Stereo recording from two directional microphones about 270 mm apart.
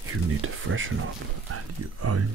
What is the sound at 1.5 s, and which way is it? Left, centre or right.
Speech, right.